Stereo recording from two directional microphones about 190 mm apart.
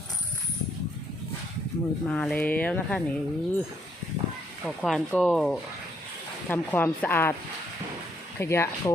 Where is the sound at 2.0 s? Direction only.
5° left (ahead or behind).